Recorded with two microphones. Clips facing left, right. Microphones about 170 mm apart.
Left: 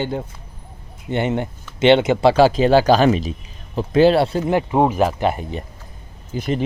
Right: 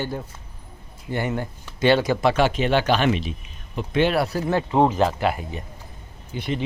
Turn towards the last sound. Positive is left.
turn(degrees=40)  # may be behind; listen again after turning